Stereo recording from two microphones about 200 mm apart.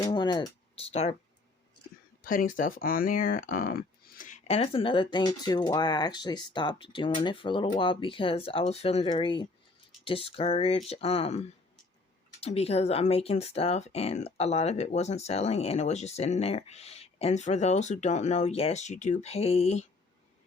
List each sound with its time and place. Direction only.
0.0 s speech: 20° left (ahead or behind)
2.2 s speech: 45° left (ahead or behind)